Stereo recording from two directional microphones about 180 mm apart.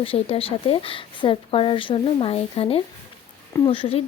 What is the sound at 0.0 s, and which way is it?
A woman's voice, 30° left (ahead or behind).